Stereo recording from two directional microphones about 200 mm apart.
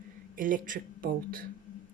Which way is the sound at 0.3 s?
45° right (ahead or behind).